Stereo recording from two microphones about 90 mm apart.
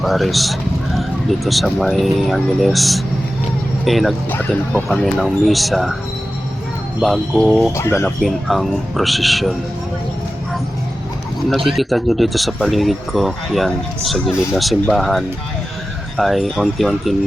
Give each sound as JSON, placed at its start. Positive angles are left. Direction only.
{"t": 0.0, "sound": "speech", "side_deg": 0}
{"t": 7.0, "sound": "speech", "side_deg": 0}
{"t": 7.8, "sound": "speech", "side_deg": 30}
{"t": 8.2, "sound": "speech", "side_deg": 0}
{"t": 11.4, "sound": "speech", "side_deg": 0}